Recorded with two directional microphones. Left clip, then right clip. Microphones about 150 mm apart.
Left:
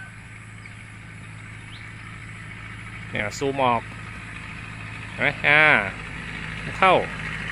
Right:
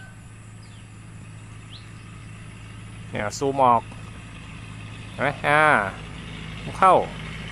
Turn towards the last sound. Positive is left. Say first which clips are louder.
# left 6 dB
turn(degrees=-70)  # may be behind; listen again after turning